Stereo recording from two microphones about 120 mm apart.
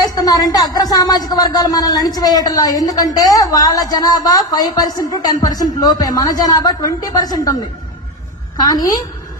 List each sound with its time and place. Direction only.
0.1 s speech: 30° left (ahead or behind)